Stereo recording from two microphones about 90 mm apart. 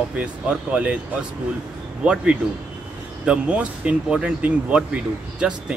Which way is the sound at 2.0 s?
15° right (ahead or behind).